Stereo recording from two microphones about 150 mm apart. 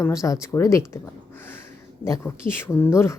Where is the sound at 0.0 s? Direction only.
20° left (ahead or behind).